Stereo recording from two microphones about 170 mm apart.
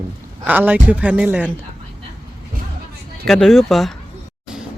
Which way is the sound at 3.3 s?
Centre (ahead or behind).